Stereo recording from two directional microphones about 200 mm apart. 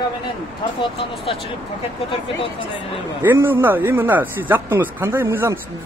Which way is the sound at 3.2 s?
10° right (ahead or behind).